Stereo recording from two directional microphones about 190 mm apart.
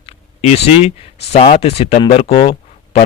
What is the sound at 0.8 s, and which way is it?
Speech, 35° left (ahead or behind).